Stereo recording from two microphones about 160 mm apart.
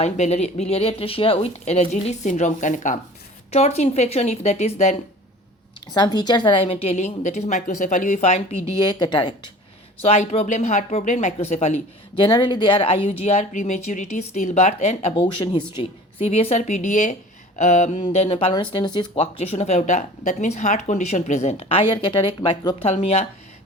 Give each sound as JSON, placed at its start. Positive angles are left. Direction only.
{"t": 0.0, "sound": "speech", "side_deg": 40}
{"t": 5.9, "sound": "speech", "side_deg": 25}
{"t": 8.9, "sound": "a woman's voice", "side_deg": 30}
{"t": 10.0, "sound": "speech", "side_deg": 40}
{"t": 12.1, "sound": "speech", "side_deg": 30}